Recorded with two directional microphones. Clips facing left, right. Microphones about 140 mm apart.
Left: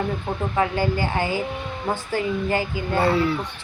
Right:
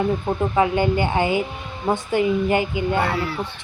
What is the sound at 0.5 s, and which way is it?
A woman's voice, 20° right (ahead or behind).